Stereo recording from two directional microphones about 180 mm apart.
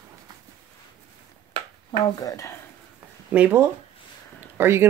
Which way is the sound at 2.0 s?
20° left (ahead or behind).